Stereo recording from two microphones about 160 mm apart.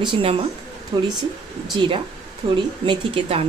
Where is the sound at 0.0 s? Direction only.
35° right (ahead or behind).